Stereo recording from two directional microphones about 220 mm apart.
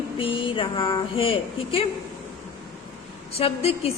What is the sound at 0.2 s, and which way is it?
A woman's voice, 25° left (ahead or behind).